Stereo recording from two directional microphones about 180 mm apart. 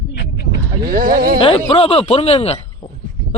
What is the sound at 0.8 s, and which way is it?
Speech, 50° right (ahead or behind).